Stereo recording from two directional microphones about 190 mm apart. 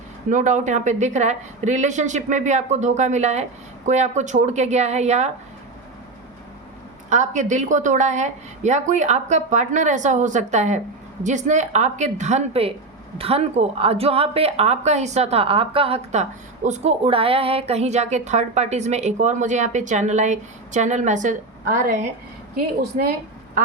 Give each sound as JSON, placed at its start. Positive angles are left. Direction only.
{"t": 0.3, "sound": "a woman's voice", "side_deg": -40}
{"t": 7.1, "sound": "a woman's voice", "side_deg": -40}